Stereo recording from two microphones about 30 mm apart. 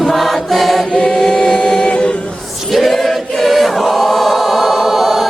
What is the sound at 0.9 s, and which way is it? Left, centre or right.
Chant, left.